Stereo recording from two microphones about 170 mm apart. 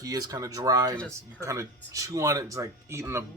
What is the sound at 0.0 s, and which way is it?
A man's voice, 20° right (ahead or behind).